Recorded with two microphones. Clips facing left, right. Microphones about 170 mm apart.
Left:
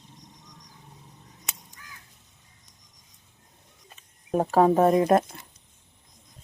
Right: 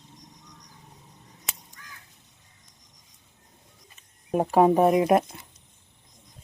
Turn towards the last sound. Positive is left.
turn(degrees=-15)  # may be behind; listen again after turning